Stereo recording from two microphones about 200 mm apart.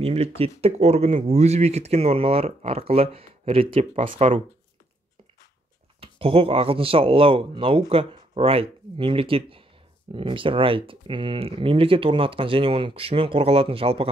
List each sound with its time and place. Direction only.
0.0 s speech: 30° right (ahead or behind)
5.9 s speech: 30° right (ahead or behind)